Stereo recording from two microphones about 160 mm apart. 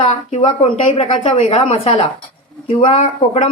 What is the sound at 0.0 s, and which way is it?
Speech, 35° left (ahead or behind).